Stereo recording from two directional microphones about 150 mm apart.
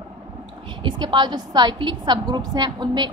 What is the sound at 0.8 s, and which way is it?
A woman's voice, 30° right (ahead or behind).